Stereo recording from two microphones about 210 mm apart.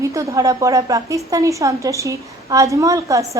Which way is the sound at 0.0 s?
15° right (ahead or behind).